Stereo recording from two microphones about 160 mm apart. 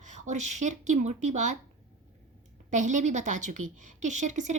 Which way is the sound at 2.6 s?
50° right (ahead or behind).